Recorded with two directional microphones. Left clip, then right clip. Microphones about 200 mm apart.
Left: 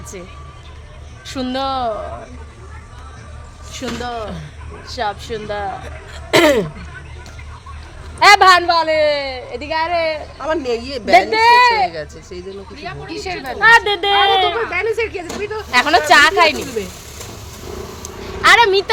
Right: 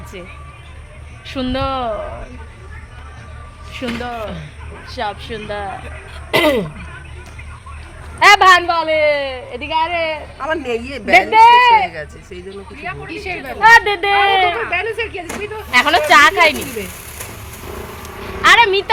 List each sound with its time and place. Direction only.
1.3 s speech: centre (ahead or behind); by 2.1 s 15° right (ahead or behind)
3.8 s speech: 15° right (ahead or behind)
4.9 s speech: 5° left (ahead or behind)
6.3 s a sound: 45° left (ahead or behind)
8.2 s a woman's voice: 10° left (ahead or behind)
10.4 s a woman's voice: 30° left (ahead or behind)
11.3 s a woman's voice: centre (ahead or behind)
13.1 s speech: 20° left (ahead or behind)
13.6 s speech: 10° right (ahead or behind)
14.7 s speech: 20° left (ahead or behind)
15.7 s speech: 10° left (ahead or behind)
18.0 s a sound: 10° left (ahead or behind)